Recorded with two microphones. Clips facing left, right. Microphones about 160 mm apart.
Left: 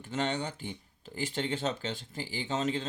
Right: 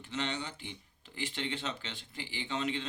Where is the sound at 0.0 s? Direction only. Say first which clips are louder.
Left 5 dB; 45° left (ahead or behind).